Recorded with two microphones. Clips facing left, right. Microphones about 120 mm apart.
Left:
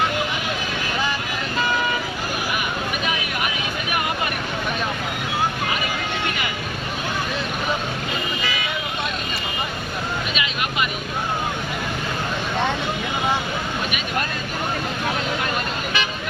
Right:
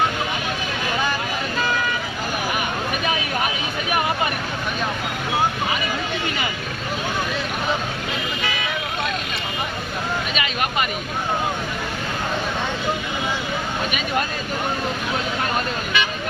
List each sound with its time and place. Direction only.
10.3 s vehicle: 40° right (ahead or behind)